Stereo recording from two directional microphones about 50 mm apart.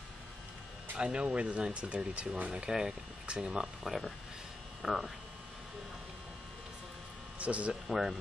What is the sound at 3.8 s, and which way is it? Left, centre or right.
Speech, centre.